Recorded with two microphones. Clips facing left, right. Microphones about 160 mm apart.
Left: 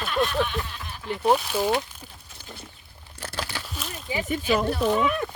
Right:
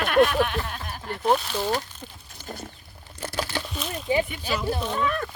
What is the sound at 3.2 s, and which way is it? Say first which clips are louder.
Crumpling: right 4 dB; 10° right (ahead or behind).